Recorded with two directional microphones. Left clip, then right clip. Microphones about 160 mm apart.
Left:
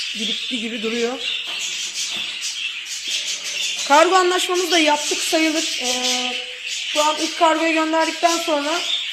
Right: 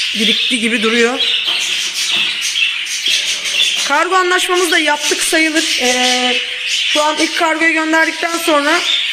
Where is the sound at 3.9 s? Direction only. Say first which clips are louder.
Left 2 dB; 10° left (ahead or behind).